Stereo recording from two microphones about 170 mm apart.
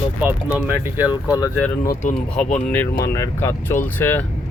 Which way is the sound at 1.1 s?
20° left (ahead or behind).